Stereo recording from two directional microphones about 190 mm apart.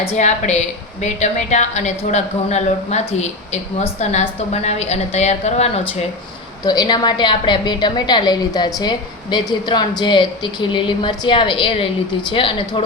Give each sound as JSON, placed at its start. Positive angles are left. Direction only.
{"t": 0.0, "sound": "speech", "side_deg": 35}
{"t": 6.7, "sound": "a woman's voice", "side_deg": 20}